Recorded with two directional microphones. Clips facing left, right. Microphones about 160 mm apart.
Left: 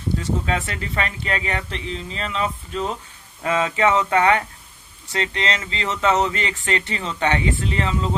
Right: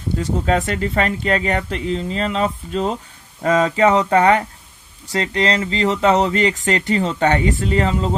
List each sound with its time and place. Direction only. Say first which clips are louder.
0.2 s speech: right 5 dB; 40° right (ahead or behind)